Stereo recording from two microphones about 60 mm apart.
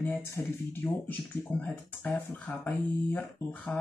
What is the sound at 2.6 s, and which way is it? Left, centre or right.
Speech, left.